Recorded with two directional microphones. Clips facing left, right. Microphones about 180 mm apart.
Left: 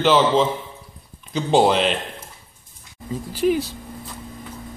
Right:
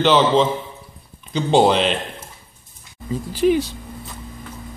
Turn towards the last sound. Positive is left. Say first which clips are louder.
# right 3 dB
turn(degrees=5)  # may be behind; listen again after turning